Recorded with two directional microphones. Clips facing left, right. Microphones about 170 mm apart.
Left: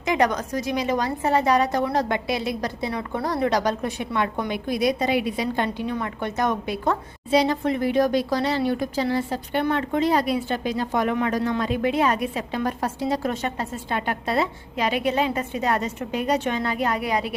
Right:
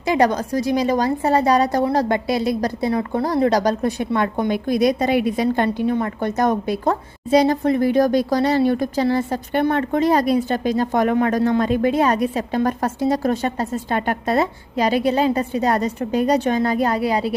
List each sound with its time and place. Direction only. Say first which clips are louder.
0.0 s a woman's voice: right 4 dB; 30° right (ahead or behind)